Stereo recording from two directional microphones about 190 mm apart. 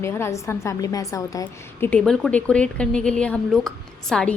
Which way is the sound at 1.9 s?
5° left (ahead or behind).